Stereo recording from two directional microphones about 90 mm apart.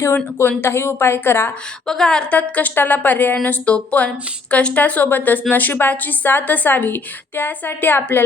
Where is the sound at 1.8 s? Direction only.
5° left (ahead or behind).